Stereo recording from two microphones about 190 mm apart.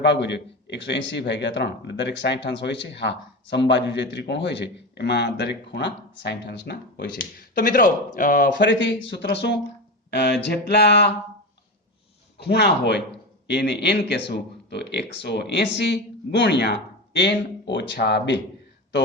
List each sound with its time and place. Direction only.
0.0 s a man's voice: 65° left (ahead or behind); by 8.6 s 45° left (ahead or behind)
8.6 s a man's voice: 70° left (ahead or behind)
12.4 s a man's voice: 60° left (ahead or behind)